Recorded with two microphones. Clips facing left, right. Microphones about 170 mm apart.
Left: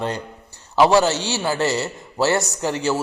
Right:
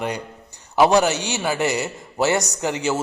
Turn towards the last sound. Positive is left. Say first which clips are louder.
# left 1 dB
turn(degrees=-20)  # may be behind; listen again after turning